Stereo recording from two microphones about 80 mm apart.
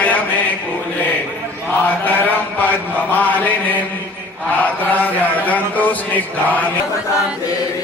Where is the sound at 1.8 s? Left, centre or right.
Left.